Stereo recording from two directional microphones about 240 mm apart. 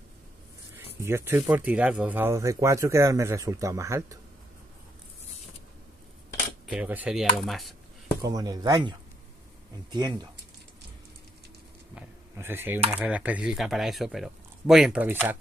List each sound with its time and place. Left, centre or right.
0.7 s speech: centre
6.7 s speech: centre
8.2 s speech: centre
11.9 s a sound: centre
12.9 s speech: centre